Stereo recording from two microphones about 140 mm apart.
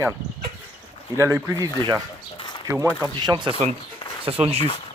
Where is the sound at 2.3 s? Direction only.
35° left (ahead or behind).